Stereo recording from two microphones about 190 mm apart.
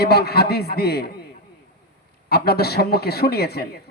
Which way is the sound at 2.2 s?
55° left (ahead or behind).